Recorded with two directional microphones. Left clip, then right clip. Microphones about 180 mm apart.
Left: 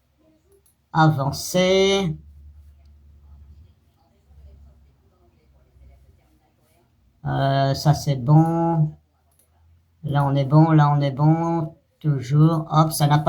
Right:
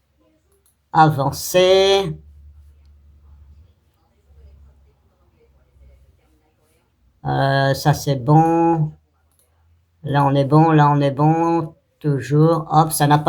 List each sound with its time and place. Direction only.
0.9 s speech: 35° right (ahead or behind)
7.2 s speech: 40° right (ahead or behind)
10.0 s speech: 40° right (ahead or behind)